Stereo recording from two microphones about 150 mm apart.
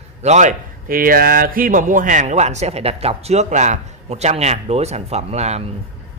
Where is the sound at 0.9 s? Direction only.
75° right (ahead or behind); by 5.7 s 45° right (ahead or behind).